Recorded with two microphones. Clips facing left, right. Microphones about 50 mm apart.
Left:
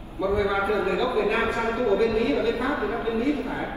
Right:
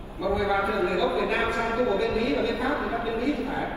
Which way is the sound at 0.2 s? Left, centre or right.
Left.